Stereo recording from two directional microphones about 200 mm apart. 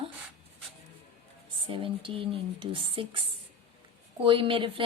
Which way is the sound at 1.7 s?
25° right (ahead or behind).